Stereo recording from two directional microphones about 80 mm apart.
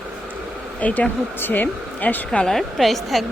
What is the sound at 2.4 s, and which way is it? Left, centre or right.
Speech, centre.